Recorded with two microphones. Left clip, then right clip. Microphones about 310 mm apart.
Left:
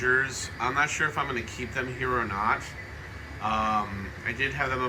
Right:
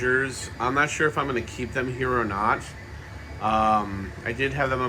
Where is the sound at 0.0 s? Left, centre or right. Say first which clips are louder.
Right 1 dB; centre.